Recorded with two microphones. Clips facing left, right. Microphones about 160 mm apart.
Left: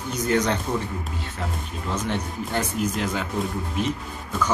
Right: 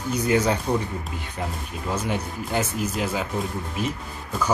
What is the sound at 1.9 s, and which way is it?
Speech, 10° right (ahead or behind).